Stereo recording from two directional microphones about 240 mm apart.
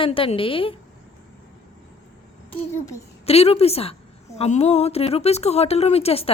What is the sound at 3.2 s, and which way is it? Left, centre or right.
A woman's voice, left.